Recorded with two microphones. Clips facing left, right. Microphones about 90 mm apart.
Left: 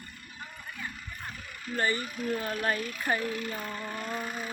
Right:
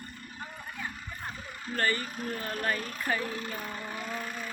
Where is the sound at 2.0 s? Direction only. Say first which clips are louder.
Left 3 dB; 40° right (ahead or behind).